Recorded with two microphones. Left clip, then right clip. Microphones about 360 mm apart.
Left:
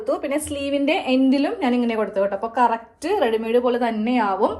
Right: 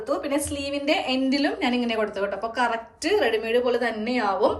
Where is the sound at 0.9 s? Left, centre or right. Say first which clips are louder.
Left 4 dB; centre.